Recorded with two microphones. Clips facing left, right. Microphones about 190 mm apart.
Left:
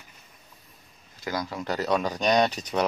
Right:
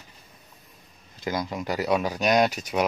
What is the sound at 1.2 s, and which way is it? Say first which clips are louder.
Speech: right 2 dB; 20° right (ahead or behind).